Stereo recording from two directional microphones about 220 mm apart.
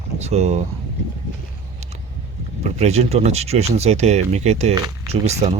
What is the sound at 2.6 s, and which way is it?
Speech, 30° right (ahead or behind).